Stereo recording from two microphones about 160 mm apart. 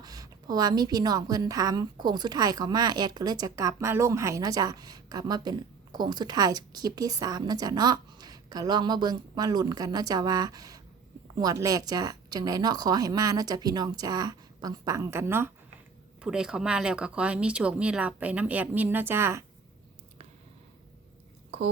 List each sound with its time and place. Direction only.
0.0 s a woman's voice: 25° right (ahead or behind)